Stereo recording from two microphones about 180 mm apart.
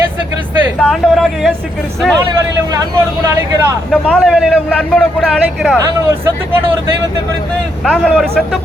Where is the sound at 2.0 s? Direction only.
Centre (ahead or behind).